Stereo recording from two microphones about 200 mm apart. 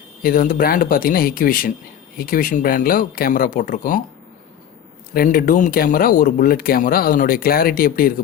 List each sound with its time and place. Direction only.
0.2 s speech: 45° left (ahead or behind)
5.1 s speech: 45° left (ahead or behind)